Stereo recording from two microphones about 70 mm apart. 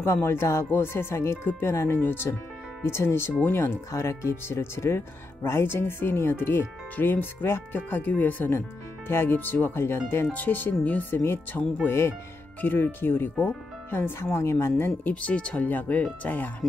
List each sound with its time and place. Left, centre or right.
0.0 s speech: left
2.0 s speech: left
2.8 s speech: left
12.6 s speech: left
15.2 s speech: centre